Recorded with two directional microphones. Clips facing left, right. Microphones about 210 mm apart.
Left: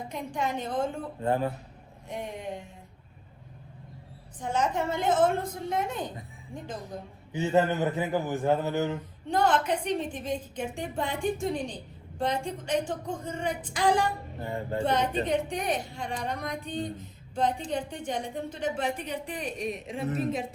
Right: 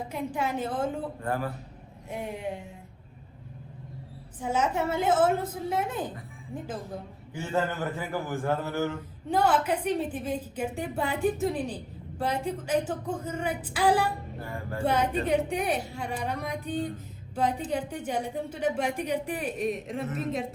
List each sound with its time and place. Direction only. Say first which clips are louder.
0.1 s a woman's voice: right 1 dB; 5° right (ahead or behind)
1.2 s a man's voice: left 6 dB; 20° left (ahead or behind)
2.0 s a woman's voice: right 2 dB; 5° right (ahead or behind)
4.4 s a woman's voice: right 1 dB; 5° right (ahead or behind)
7.3 s a man's voice: left 5 dB; 20° left (ahead or behind)
9.3 s a woman's voice: right 1 dB; 5° right (ahead or behind)
14.4 s a man's voice: left 4 dB; 25° left (ahead or behind)
14.8 s a woman's voice: right 2 dB; 10° right (ahead or behind)